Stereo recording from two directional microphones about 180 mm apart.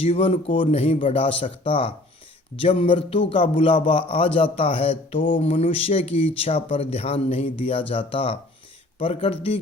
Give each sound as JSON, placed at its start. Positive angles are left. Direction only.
{"t": 0.0, "sound": "mantra", "side_deg": 30}
{"t": 2.6, "sound": "a man's voice", "side_deg": 30}
{"t": 4.5, "sound": "mantra", "side_deg": 30}